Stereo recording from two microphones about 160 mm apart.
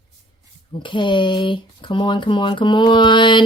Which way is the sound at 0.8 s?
30° left (ahead or behind).